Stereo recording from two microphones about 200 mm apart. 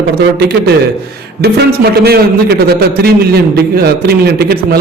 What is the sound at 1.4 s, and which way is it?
A man's voice, 55° right (ahead or behind).